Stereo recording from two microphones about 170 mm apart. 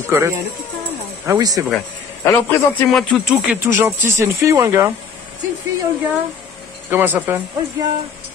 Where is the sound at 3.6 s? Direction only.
15° right (ahead or behind).